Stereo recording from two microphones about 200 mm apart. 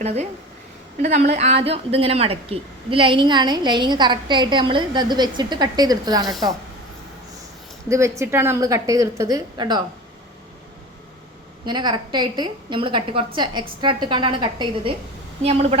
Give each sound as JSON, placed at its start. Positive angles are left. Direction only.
{"t": 0.0, "sound": "a woman's voice", "side_deg": -30}
{"t": 7.9, "sound": "a woman's voice", "side_deg": -15}
{"t": 11.6, "sound": "a woman's voice", "side_deg": -20}